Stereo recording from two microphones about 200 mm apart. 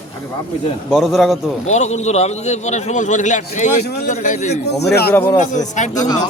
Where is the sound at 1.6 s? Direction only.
35° left (ahead or behind).